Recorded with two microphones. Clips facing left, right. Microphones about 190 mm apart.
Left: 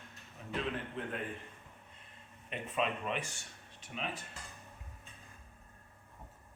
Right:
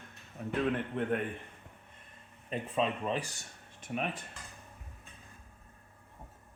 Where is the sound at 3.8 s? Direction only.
50° right (ahead or behind).